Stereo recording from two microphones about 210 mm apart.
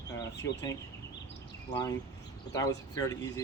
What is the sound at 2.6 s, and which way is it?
Speech, 15° left (ahead or behind).